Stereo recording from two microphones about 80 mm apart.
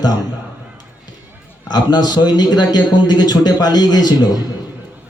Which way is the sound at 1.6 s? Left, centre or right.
Left.